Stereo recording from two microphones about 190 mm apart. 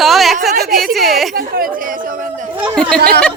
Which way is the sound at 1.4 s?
50° right (ahead or behind).